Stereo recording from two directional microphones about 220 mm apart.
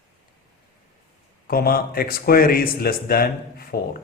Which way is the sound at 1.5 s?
40° left (ahead or behind).